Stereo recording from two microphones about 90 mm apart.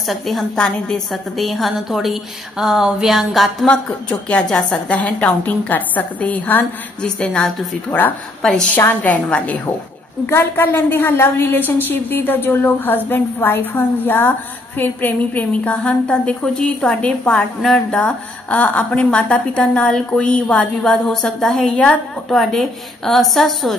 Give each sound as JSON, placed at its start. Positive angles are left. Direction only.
{"t": 0.0, "sound": "a woman's voice", "side_deg": 0}
{"t": 3.6, "sound": "a woman's voice", "side_deg": 15}
{"t": 8.7, "sound": "a woman's voice", "side_deg": 20}
{"t": 21.7, "sound": "a woman's voice", "side_deg": 15}
{"t": 22.3, "sound": "a woman's voice", "side_deg": 5}